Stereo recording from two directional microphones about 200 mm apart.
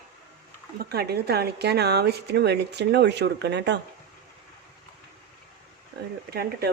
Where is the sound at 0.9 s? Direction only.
50° right (ahead or behind).